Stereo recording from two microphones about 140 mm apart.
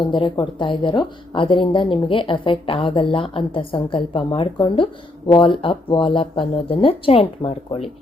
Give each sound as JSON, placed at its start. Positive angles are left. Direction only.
{"t": 0.1, "sound": "a woman's voice", "side_deg": 35}